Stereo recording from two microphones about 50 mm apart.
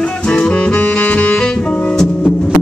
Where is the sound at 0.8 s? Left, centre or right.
Left.